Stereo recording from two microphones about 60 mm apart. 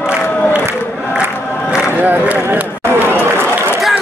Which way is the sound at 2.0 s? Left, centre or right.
Right.